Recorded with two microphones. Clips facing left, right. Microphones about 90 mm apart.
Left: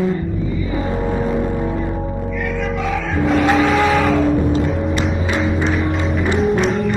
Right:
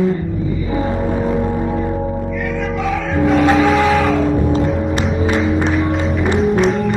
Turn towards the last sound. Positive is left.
turn(degrees=0)  # may be behind; listen again after turning